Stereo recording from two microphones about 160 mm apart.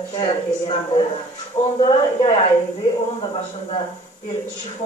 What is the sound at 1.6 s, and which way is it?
Speech, 50° left (ahead or behind).